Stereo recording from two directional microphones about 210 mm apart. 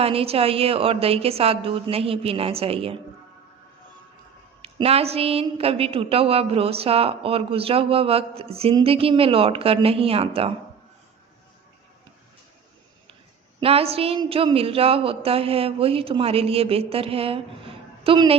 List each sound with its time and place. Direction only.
0.0 s a woman's voice: 25° right (ahead or behind)
4.6 s a woman's voice: 30° right (ahead or behind)
13.6 s a woman's voice: 30° right (ahead or behind)